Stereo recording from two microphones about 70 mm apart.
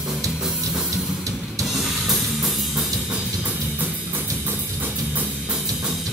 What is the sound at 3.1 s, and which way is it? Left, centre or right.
Music, right.